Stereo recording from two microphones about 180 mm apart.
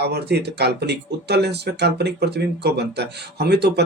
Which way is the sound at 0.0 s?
65° right (ahead or behind).